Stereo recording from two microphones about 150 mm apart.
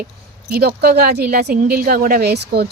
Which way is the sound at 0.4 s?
90° right.